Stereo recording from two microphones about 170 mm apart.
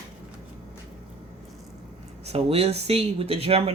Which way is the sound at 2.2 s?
35° right (ahead or behind).